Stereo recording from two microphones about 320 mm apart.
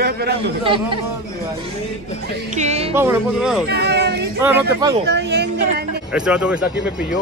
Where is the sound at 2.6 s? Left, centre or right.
Right.